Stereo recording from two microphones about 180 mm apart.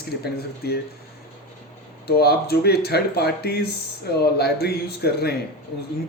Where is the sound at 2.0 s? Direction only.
60° left (ahead or behind).